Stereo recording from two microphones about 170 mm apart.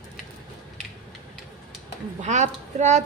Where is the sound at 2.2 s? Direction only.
45° right (ahead or behind).